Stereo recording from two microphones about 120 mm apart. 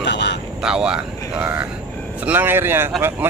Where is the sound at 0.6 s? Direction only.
5° right (ahead or behind).